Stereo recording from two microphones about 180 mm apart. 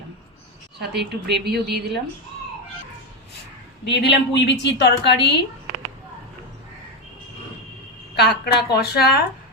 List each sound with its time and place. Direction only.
0.8 s a woman's voice: 65° right (ahead or behind)
3.8 s a woman's voice: 75° left (ahead or behind)
8.1 s a woman's voice: 65° left (ahead or behind)